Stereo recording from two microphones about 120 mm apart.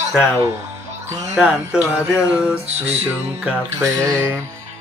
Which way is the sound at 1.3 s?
Centre (ahead or behind).